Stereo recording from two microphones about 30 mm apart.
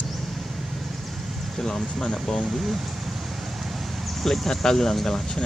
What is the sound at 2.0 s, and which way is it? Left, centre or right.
Speech, left.